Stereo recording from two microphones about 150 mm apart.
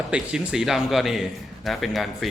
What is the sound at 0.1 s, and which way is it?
A man's voice, 5° right (ahead or behind).